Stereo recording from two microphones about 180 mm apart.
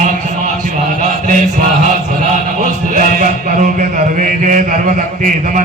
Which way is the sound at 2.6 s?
45° right (ahead or behind).